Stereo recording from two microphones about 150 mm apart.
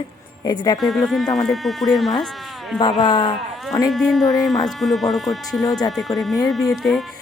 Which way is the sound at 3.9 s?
Centre (ahead or behind).